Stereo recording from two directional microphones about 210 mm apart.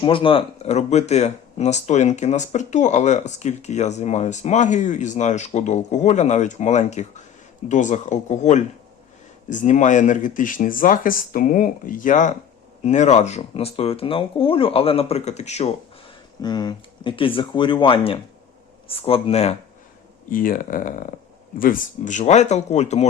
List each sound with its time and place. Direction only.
0.0 s speech: 25° left (ahead or behind)
16.4 s speech: 20° left (ahead or behind)
20.3 s speech: 40° left (ahead or behind)